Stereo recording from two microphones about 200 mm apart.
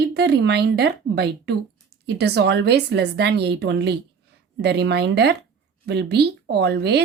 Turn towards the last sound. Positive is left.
turn(degrees=-55)  # may be behind; listen again after turning